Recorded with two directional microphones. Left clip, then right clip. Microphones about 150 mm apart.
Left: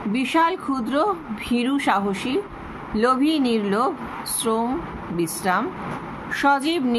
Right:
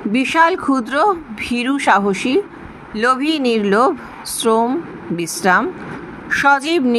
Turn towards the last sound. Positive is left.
turn(degrees=-45)  # may be behind; listen again after turning